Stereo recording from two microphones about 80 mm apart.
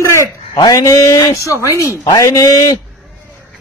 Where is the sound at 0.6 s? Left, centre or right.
Left.